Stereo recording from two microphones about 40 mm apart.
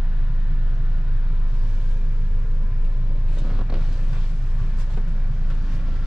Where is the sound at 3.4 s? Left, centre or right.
Centre.